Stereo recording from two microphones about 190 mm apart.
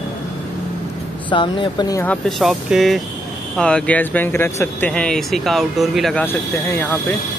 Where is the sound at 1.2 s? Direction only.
25° left (ahead or behind).